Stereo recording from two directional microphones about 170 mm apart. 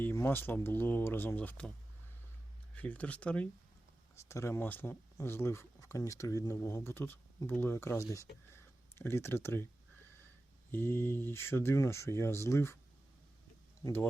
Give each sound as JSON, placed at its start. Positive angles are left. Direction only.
{"t": 0.0, "sound": "speech", "side_deg": 15}
{"t": 2.7, "sound": "speech", "side_deg": 10}
{"t": 10.7, "sound": "speech", "side_deg": 15}
{"t": 13.8, "sound": "speech", "side_deg": 15}